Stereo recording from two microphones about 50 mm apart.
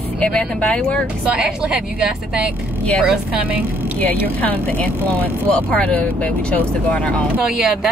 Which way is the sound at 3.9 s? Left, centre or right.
Left.